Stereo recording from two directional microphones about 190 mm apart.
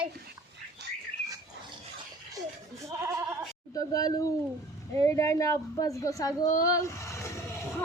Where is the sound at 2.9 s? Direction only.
15° right (ahead or behind).